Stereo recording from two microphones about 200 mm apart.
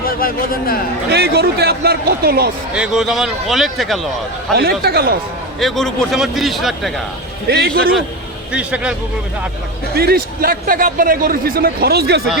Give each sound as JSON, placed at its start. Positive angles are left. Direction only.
{"t": 0.0, "sound": "a man's voice", "side_deg": 45}
{"t": 1.1, "sound": "a man's voice", "side_deg": -55}
{"t": 2.7, "sound": "a man's voice", "side_deg": -5}
{"t": 4.5, "sound": "a man's voice", "side_deg": -50}
{"t": 5.5, "sound": "a man's voice", "side_deg": 0}
{"t": 7.4, "sound": "a man's voice", "side_deg": -55}
{"t": 8.5, "sound": "a man's voice", "side_deg": -5}
{"t": 9.9, "sound": "a man's voice", "side_deg": -50}